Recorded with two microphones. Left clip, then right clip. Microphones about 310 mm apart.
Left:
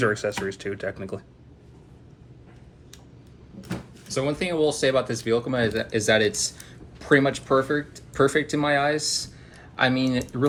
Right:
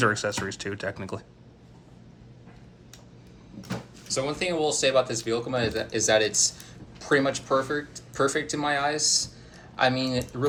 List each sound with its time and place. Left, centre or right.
0.0 s speech: centre
4.1 s speech: left